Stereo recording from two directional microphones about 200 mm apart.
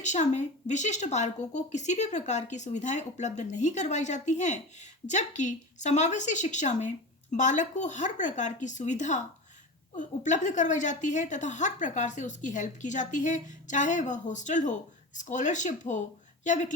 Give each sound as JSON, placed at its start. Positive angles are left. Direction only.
{"t": 0.0, "sound": "a woman's voice", "side_deg": 35}